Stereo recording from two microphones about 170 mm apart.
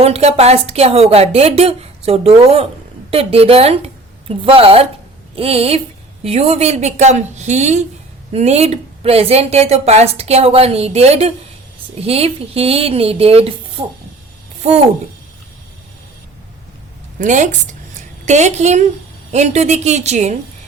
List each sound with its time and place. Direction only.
0.0 s a woman's voice: 40° right (ahead or behind)
17.2 s a woman's voice: 45° right (ahead or behind)